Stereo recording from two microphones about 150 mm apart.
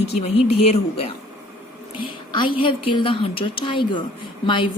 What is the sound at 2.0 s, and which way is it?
A woman's voice, 35° left (ahead or behind).